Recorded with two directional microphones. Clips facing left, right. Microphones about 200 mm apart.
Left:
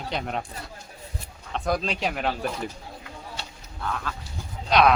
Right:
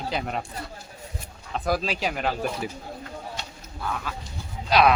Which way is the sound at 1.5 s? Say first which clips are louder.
Even; 5° right (ahead or behind).